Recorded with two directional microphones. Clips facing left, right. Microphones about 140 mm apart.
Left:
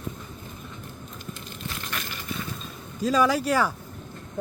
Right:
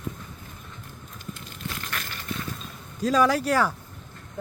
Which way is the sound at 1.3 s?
20° left (ahead or behind).